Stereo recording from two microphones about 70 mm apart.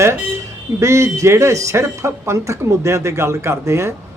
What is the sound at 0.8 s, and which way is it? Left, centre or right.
Speech, right.